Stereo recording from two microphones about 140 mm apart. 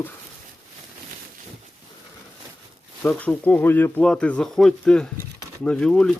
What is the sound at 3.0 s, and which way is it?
Speech, 10° left (ahead or behind).